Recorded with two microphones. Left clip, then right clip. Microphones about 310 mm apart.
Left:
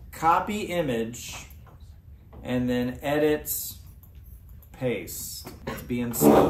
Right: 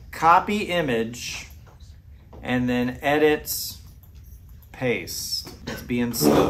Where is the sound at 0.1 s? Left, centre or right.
Centre.